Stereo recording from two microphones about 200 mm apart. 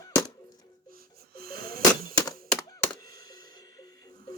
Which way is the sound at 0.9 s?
50° right (ahead or behind).